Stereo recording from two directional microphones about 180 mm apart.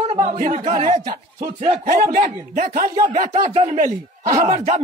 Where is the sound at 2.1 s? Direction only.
45° right (ahead or behind).